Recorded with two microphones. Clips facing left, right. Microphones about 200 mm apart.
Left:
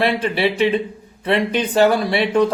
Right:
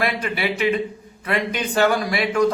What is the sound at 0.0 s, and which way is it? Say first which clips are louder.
A man's voice: left 5 dB; 30° left (ahead or behind).